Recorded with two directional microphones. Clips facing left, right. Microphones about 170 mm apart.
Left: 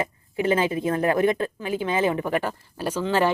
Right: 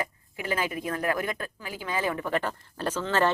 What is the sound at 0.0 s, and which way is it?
A woman's voice, 25° left (ahead or behind).